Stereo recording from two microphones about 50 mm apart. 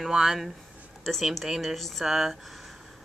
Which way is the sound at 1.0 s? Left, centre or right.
Centre.